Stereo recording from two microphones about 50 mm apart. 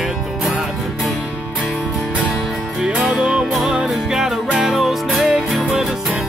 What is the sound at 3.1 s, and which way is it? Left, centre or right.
Music, centre.